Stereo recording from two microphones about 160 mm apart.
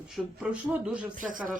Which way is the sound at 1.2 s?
55° right (ahead or behind).